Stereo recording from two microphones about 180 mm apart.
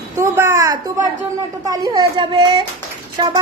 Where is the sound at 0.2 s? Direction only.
15° right (ahead or behind).